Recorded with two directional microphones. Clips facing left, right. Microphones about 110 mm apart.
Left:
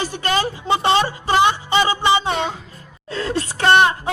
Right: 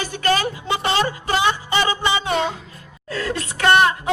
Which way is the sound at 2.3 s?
Centre (ahead or behind).